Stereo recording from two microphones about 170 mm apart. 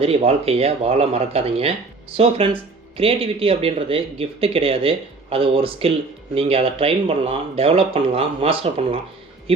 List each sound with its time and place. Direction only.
0.0 s speech: 35° right (ahead or behind)